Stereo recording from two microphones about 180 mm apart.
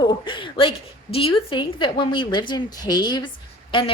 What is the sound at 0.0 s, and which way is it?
A woman's voice, 25° left (ahead or behind).